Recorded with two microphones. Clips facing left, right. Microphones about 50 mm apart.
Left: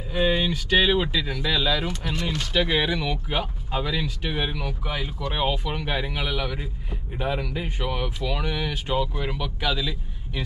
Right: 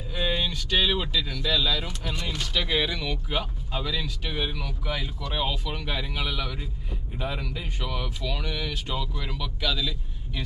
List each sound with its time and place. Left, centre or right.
0.1 s speech: centre
1.9 s speech: centre
2.5 s speech: centre